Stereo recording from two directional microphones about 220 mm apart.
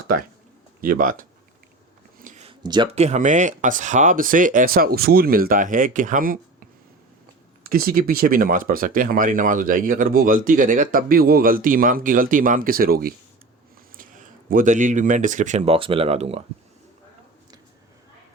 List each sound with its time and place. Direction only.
0.8 s speech: 40° right (ahead or behind)